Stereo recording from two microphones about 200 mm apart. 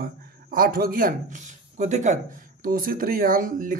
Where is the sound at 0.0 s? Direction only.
45° right (ahead or behind).